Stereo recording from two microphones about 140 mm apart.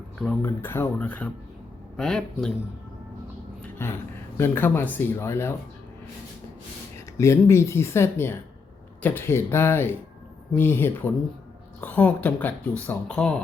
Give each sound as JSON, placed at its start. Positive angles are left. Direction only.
{"t": 0.4, "sound": "speech", "side_deg": 15}
{"t": 3.6, "sound": "a sound", "side_deg": 15}
{"t": 4.4, "sound": "speech", "side_deg": 15}
{"t": 7.2, "sound": "speech", "side_deg": 20}